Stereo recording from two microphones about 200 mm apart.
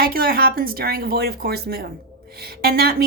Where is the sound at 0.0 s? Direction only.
45° right (ahead or behind).